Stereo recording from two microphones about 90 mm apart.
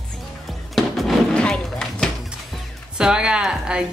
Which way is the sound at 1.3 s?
10° left (ahead or behind).